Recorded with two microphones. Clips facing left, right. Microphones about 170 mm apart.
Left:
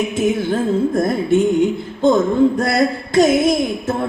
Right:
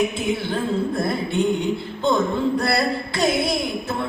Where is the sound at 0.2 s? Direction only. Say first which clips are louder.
Left 6 dB; 45° left (ahead or behind).